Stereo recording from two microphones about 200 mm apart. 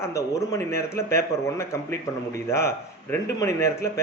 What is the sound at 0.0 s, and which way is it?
A man's voice, 15° left (ahead or behind).